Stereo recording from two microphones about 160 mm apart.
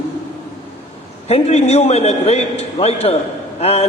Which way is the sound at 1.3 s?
40° left (ahead or behind).